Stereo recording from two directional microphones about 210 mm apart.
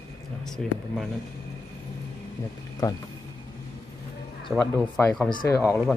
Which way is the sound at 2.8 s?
15° left (ahead or behind).